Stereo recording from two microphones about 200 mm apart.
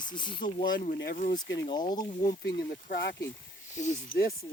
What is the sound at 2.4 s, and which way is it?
Speech, 60° left (ahead or behind).